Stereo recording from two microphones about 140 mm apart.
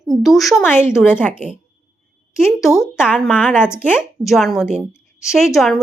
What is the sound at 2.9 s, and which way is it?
Speech, 5° right (ahead or behind).